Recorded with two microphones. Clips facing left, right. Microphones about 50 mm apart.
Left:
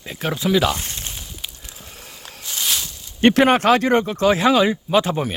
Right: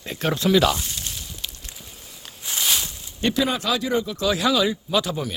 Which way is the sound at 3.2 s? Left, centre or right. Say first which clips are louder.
Left 8 dB; left.